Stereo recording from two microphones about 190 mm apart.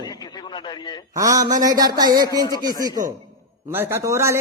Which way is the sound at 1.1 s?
20° right (ahead or behind).